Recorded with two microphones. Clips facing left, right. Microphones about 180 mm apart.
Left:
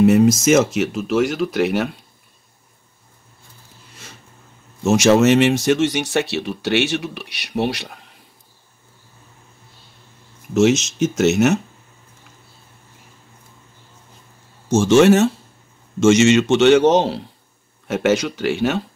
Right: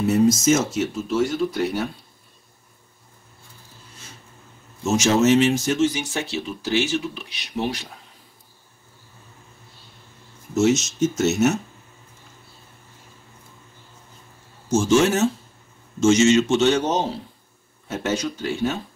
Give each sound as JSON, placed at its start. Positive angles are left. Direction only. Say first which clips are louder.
{"t": 0.0, "sound": "speech", "louder": "left 5 dB", "side_deg": 80}
{"t": 4.8, "sound": "speech", "louder": "left 5 dB", "side_deg": 75}
{"t": 10.5, "sound": "speech", "louder": "left 4 dB", "side_deg": 90}
{"t": 11.0, "sound": "a man's voice", "louder": "left 3 dB", "side_deg": 80}
{"t": 14.7, "sound": "a man's voice", "louder": "left 6 dB", "side_deg": 75}